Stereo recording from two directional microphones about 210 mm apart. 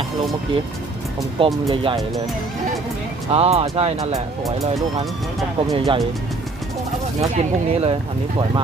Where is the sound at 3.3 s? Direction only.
30° right (ahead or behind).